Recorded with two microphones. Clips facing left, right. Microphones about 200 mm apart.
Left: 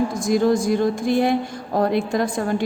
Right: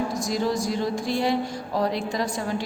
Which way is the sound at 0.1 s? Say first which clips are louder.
Left 7 dB; 50° left (ahead or behind).